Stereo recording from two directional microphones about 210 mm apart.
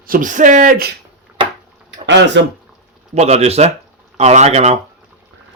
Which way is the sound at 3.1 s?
30° right (ahead or behind).